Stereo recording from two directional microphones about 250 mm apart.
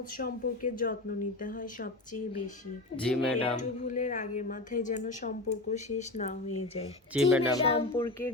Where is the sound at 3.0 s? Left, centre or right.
Centre.